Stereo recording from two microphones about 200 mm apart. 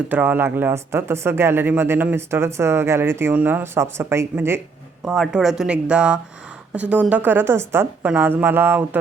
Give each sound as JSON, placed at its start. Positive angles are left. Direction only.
{"t": 0.1, "sound": "speech", "side_deg": -10}
{"t": 5.0, "sound": "speech", "side_deg": 0}